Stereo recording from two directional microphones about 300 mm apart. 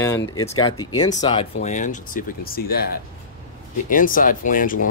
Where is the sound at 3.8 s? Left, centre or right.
Left.